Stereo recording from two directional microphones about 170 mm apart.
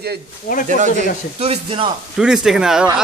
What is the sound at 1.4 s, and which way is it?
Speech, 35° right (ahead or behind).